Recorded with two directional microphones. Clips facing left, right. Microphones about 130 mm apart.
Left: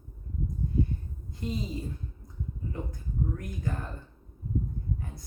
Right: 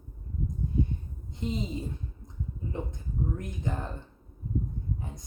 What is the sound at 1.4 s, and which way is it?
Speech, 20° right (ahead or behind).